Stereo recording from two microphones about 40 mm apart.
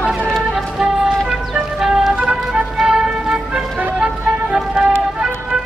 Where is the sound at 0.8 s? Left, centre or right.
Centre.